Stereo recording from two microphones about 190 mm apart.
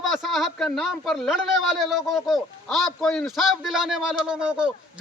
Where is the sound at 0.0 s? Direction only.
Centre (ahead or behind).